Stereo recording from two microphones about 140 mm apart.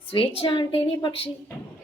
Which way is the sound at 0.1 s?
40° left (ahead or behind).